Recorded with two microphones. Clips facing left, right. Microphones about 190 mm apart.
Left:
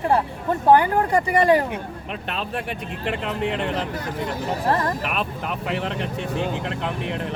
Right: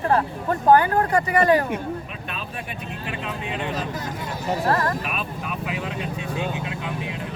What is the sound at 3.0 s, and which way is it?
Speech, 65° left (ahead or behind).